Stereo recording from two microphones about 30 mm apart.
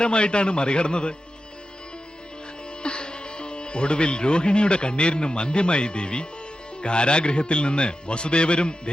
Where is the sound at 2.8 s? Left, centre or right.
Left.